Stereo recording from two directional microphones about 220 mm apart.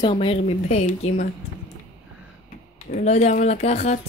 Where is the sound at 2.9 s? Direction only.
30° left (ahead or behind).